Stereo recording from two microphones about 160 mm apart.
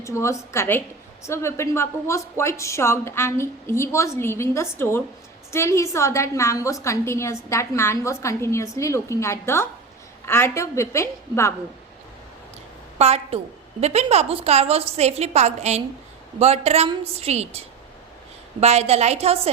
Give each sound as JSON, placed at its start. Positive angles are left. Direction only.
{"t": 0.0, "sound": "a woman's voice", "side_deg": 20}
{"t": 13.0, "sound": "a woman's voice", "side_deg": -40}